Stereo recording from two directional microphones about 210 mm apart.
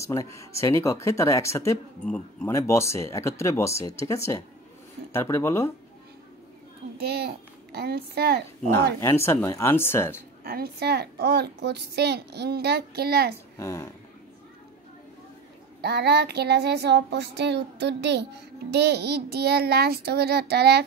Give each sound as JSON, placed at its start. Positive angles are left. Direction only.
{"t": 0.0, "sound": "speech", "side_deg": 15}
{"t": 7.0, "sound": "a child's voice", "side_deg": -50}
{"t": 9.0, "sound": "speech", "side_deg": 10}
{"t": 10.4, "sound": "child singing", "side_deg": -45}
{"t": 13.6, "sound": "speech", "side_deg": 15}
{"t": 15.8, "sound": "child singing", "side_deg": -50}